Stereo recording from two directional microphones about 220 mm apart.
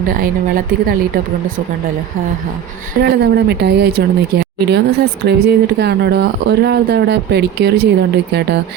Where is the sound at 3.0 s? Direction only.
50° right (ahead or behind).